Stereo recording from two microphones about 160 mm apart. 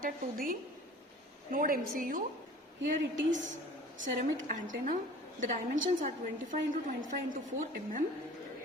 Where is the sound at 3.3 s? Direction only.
50° right (ahead or behind).